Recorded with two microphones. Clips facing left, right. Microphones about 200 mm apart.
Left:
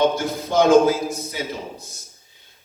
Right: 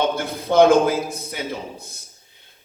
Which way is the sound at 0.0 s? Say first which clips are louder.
Left 3 dB; 55° right (ahead or behind).